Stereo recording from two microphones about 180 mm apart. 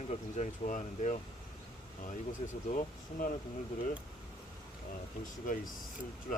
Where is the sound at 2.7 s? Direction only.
45° left (ahead or behind).